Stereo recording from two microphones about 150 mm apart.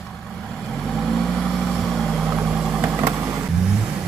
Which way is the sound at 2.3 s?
15° right (ahead or behind).